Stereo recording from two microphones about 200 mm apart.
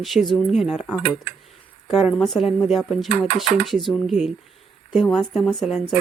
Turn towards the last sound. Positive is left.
turn(degrees=0)  # may be behind; listen again after turning